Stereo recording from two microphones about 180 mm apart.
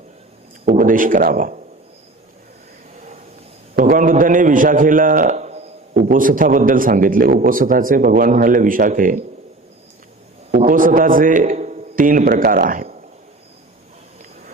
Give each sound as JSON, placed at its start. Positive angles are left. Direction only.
{"t": 0.6, "sound": "a man's voice", "side_deg": -50}
{"t": 3.8, "sound": "a man's voice", "side_deg": -50}
{"t": 5.9, "sound": "a man's voice", "side_deg": -50}
{"t": 10.7, "sound": "a man's voice", "side_deg": -50}